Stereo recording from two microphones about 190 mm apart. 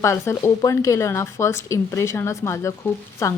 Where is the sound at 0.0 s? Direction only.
15° left (ahead or behind).